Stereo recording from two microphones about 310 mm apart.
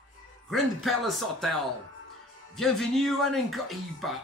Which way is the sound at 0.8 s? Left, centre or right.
Centre.